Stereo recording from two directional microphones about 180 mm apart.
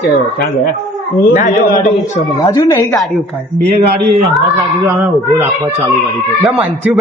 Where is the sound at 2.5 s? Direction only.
15° left (ahead or behind).